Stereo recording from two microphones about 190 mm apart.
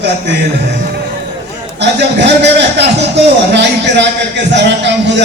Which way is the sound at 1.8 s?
65° right (ahead or behind).